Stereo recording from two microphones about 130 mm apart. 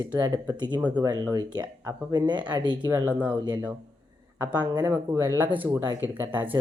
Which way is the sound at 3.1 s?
10° right (ahead or behind).